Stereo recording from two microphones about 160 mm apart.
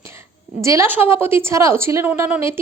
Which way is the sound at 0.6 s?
15° right (ahead or behind).